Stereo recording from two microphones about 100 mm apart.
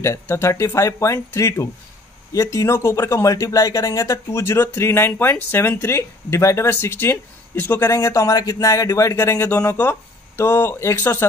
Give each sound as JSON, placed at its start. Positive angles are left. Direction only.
{"t": 0.0, "sound": "speech", "side_deg": 30}
{"t": 7.9, "sound": "speech", "side_deg": 30}